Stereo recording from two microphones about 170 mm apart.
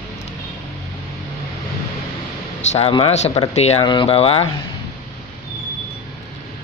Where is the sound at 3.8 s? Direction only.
30° left (ahead or behind).